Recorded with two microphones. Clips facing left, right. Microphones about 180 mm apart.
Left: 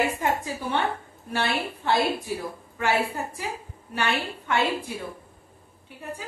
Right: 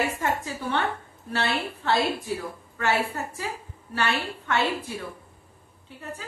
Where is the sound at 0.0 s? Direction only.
15° left (ahead or behind).